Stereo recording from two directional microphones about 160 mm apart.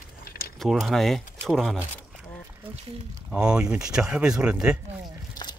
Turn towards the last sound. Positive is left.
turn(degrees=-5)  # may be behind; listen again after turning